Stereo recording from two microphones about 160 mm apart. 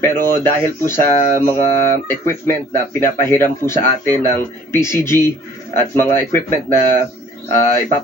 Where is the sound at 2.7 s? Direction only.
15° left (ahead or behind).